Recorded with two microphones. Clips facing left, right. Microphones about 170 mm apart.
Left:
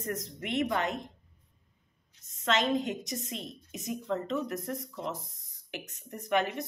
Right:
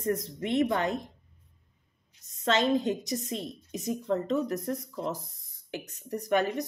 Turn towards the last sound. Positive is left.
turn(degrees=-40)  # may be behind; listen again after turning